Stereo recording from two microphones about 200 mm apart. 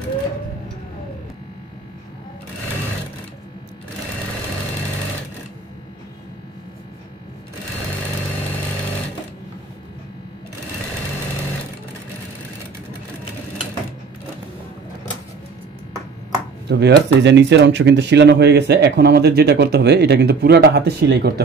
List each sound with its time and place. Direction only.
16.6 s speech: 60° right (ahead or behind)